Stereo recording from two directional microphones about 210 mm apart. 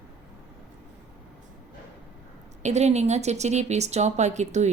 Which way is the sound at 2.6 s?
30° right (ahead or behind).